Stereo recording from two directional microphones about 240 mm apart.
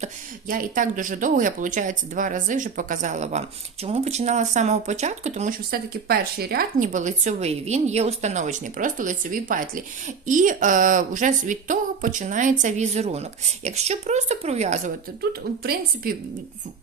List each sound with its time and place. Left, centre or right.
0.0 s speech: right